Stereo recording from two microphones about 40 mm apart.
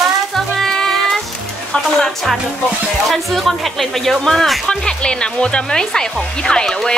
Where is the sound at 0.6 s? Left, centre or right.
Centre.